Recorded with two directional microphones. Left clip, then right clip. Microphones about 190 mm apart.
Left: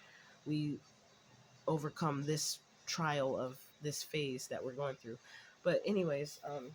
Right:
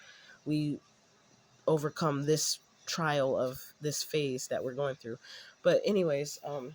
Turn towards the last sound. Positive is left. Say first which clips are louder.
# right 7 dB
turn(degrees=-35)  # may be behind; listen again after turning